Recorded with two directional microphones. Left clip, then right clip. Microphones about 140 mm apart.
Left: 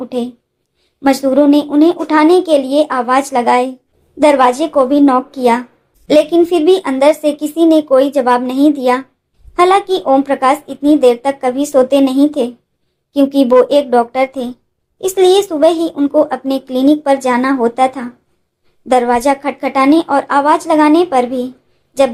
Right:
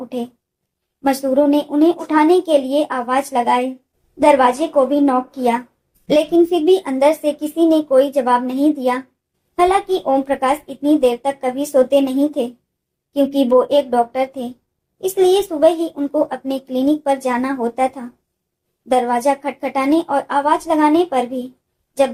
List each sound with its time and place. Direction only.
1.0 s speech: 40° left (ahead or behind)